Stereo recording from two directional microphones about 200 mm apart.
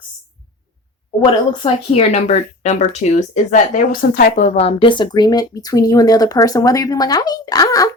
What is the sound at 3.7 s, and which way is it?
Speech, 45° left (ahead or behind).